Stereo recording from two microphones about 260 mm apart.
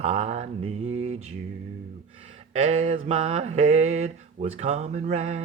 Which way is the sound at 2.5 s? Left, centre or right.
Right.